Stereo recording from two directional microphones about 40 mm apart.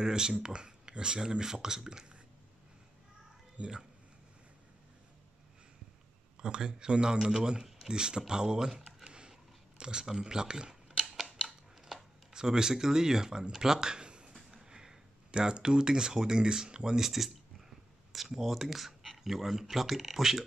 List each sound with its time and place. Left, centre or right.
0.0 s speech: centre
3.6 s speech: right
6.3 s a man's voice: centre
9.0 s a sound: right
9.8 s speech: right
11.2 s a sound: centre
14.5 s speech: centre